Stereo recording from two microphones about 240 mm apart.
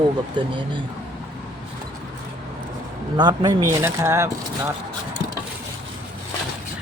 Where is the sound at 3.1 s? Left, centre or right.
Centre.